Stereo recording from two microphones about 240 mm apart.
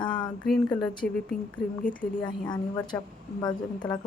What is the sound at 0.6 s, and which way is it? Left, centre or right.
Speech, centre.